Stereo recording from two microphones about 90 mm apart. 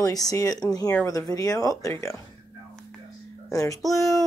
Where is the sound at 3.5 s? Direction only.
40° left (ahead or behind).